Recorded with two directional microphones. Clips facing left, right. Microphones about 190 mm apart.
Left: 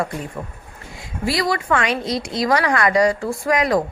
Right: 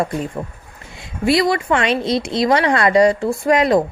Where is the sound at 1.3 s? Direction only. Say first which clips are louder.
Right 5 dB; 25° right (ahead or behind).